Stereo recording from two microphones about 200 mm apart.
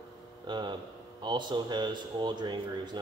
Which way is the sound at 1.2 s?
20° right (ahead or behind).